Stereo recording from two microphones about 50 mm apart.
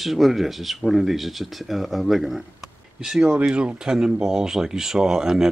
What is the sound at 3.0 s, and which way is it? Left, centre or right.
Speech, centre.